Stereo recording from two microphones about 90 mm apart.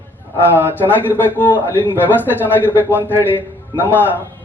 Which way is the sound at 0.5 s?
20° left (ahead or behind).